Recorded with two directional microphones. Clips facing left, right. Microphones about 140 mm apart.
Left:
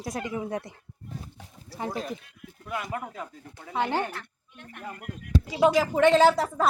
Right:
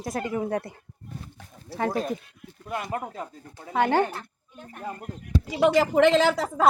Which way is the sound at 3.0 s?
30° right (ahead or behind).